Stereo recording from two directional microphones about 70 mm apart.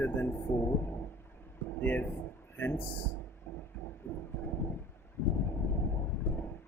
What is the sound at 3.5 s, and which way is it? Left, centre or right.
Heart murmur, left.